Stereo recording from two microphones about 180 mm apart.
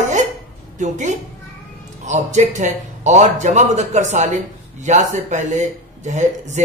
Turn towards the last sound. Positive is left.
turn(degrees=-40)  # may be behind; listen again after turning